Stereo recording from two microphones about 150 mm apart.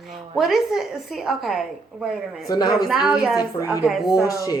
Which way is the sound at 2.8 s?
5° right (ahead or behind).